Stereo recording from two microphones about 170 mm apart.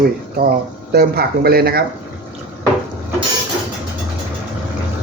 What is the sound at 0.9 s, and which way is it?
Speech, 65° right (ahead or behind).